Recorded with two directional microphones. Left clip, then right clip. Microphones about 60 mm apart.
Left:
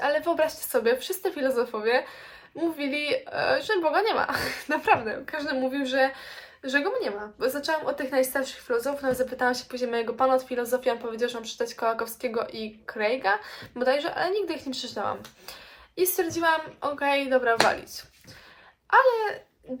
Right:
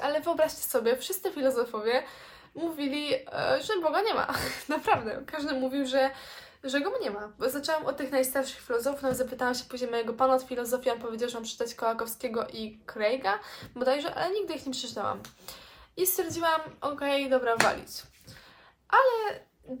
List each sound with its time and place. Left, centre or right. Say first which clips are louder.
0.0 s speech: left 3 dB; right